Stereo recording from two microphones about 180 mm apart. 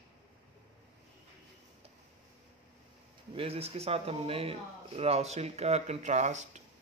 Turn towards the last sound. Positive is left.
turn(degrees=-40)  # may be behind; listen again after turning